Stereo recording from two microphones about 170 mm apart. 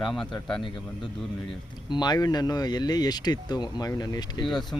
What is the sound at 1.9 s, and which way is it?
Speech, 25° left (ahead or behind).